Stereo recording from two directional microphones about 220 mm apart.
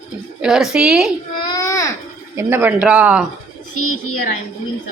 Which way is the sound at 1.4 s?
15° left (ahead or behind).